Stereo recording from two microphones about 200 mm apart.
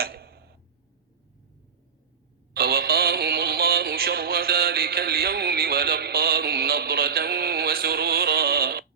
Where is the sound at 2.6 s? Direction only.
50° right (ahead or behind).